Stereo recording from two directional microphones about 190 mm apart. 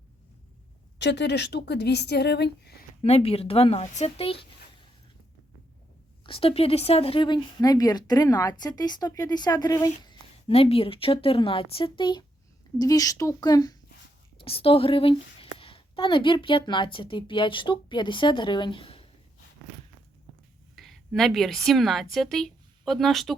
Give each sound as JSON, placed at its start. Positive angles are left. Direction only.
{"t": 0.9, "sound": "speech", "side_deg": 65}
{"t": 3.0, "sound": "speech", "side_deg": 30}
{"t": 6.2, "sound": "speech", "side_deg": 30}
{"t": 20.7, "sound": "a woman's voice", "side_deg": 0}